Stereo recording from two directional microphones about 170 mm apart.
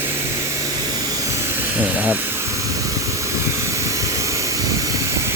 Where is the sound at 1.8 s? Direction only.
10° right (ahead or behind).